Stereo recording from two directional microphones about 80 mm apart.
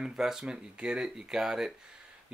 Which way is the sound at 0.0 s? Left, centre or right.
Centre.